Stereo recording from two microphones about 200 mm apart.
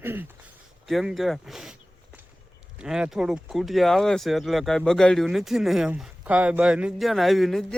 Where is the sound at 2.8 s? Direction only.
5° right (ahead or behind).